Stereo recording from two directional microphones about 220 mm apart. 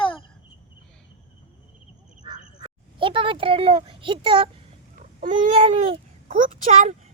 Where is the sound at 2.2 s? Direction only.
20° right (ahead or behind).